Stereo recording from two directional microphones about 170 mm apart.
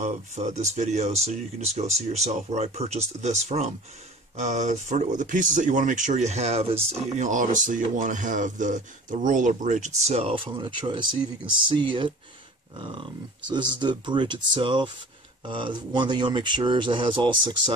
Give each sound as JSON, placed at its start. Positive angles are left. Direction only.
{"t": 0.0, "sound": "speech", "side_deg": -40}